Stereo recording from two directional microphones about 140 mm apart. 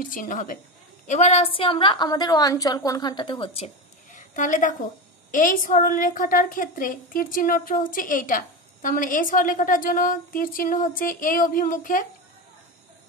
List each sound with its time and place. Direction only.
0.0 s a woman's voice: 75° left (ahead or behind)
1.0 s a woman's voice: 55° left (ahead or behind)
4.1 s a sound: 65° left (ahead or behind)
5.3 s a woman's voice: 75° left (ahead or behind)